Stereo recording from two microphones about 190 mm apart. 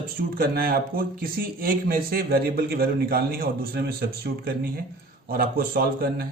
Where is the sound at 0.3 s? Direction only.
50° right (ahead or behind).